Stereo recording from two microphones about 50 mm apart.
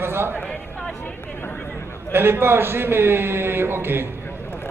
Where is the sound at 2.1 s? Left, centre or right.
Right.